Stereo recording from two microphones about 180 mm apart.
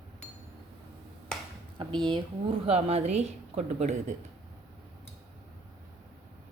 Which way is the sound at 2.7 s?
35° right (ahead or behind).